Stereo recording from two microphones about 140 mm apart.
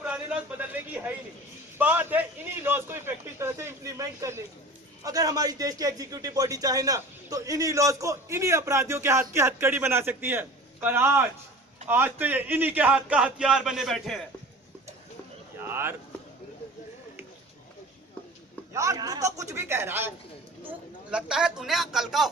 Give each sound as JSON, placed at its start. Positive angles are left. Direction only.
{"t": 0.0, "sound": "a sound", "side_deg": -10}
{"t": 1.8, "sound": "a man's voice", "side_deg": -10}
{"t": 15.5, "sound": "speech", "side_deg": -15}
{"t": 18.7, "sound": "a man's voice", "side_deg": -20}